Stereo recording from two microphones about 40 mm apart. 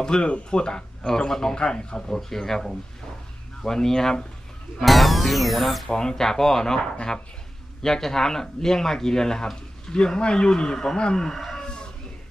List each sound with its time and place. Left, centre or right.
0.0 s speech: left
2.1 s speech: centre
4.7 s speech: centre
5.9 s speech: centre